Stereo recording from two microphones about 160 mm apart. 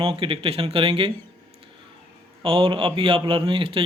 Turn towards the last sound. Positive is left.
turn(degrees=-35)  # may be behind; listen again after turning